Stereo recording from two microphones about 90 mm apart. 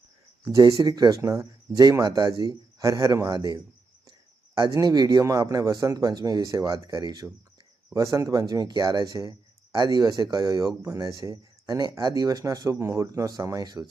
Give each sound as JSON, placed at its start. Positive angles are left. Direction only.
{"t": 0.4, "sound": "speech", "side_deg": -40}
{"t": 0.8, "sound": "speech", "side_deg": -50}
{"t": 4.7, "sound": "speech", "side_deg": -45}